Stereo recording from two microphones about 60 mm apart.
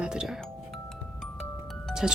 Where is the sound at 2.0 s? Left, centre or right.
Centre.